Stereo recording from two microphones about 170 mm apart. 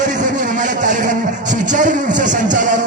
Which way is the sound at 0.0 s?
45° right (ahead or behind).